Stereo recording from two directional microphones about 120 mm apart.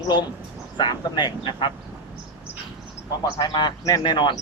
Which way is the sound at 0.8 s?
35° left (ahead or behind).